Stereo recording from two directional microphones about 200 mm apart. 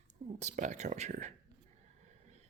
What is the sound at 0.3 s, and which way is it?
Speech, 35° right (ahead or behind).